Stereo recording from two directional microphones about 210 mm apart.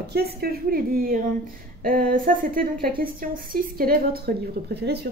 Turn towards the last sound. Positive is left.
turn(degrees=-50)  # may be behind; listen again after turning